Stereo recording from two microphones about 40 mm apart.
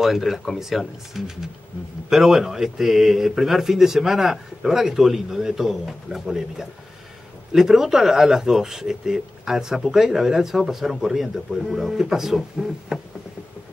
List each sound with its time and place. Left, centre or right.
0.0 s speech: centre